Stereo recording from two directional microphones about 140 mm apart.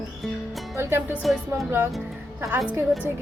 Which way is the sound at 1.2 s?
Centre (ahead or behind).